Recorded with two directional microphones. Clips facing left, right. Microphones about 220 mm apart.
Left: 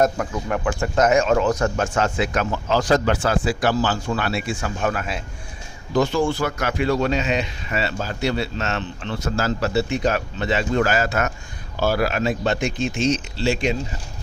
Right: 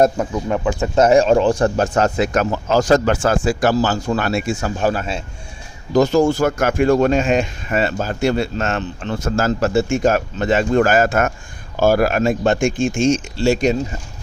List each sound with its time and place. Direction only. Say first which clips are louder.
0.0 s speech: right 4 dB; 20° right (ahead or behind)
0.9 s speech: right 5 dB; 30° right (ahead or behind)
5.9 s speech: right 6 dB; 40° right (ahead or behind)